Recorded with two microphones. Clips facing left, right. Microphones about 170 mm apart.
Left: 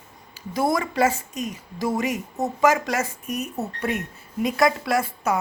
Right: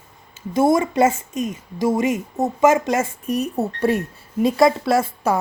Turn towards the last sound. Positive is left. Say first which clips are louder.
# right 4 dB
turn(degrees=-30)  # may be behind; listen again after turning